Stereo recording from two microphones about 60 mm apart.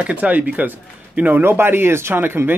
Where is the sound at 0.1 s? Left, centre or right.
Right.